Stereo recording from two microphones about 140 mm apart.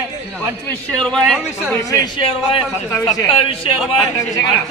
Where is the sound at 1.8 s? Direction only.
25° left (ahead or behind).